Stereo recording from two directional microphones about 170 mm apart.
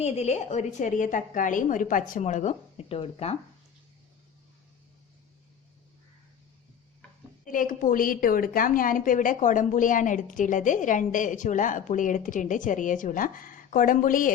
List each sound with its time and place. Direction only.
0.0 s a woman's voice: 40° left (ahead or behind)
7.4 s a woman's voice: 55° left (ahead or behind)